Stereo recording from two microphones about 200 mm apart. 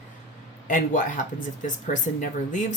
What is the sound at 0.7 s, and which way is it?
Speech, 40° left (ahead or behind).